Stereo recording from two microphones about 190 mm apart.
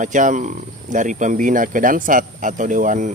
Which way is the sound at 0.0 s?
40° right (ahead or behind).